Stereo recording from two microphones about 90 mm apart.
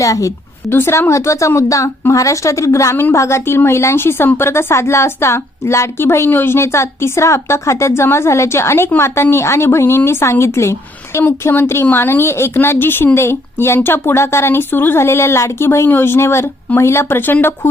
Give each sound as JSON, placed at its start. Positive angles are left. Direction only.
{"t": 0.0, "sound": "a woman's voice", "side_deg": 40}
{"t": 0.7, "sound": "a woman's voice", "side_deg": 25}